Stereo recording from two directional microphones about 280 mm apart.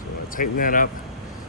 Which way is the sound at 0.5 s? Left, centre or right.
Left.